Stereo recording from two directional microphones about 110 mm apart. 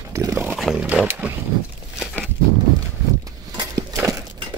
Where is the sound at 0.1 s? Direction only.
30° right (ahead or behind).